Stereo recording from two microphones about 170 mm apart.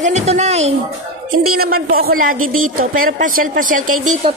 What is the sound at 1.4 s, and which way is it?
A woman's voice, 65° right (ahead or behind).